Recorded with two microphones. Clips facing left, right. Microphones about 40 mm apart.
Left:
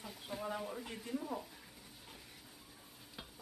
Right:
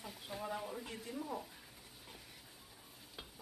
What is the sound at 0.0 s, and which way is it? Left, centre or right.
Speech, centre.